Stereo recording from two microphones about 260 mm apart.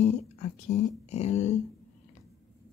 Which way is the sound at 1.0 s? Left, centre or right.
Left.